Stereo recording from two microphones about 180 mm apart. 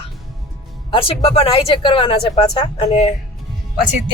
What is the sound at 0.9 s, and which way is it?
Speech, 30° left (ahead or behind).